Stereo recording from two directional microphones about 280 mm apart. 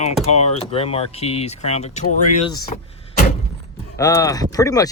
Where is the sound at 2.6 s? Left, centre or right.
Left.